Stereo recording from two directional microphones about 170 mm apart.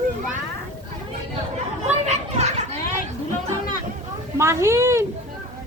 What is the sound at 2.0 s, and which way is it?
Children playing, 40° right (ahead or behind).